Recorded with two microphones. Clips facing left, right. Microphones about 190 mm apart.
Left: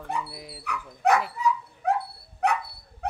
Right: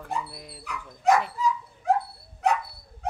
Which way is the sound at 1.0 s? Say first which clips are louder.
Right 1 dB; 60° left (ahead or behind).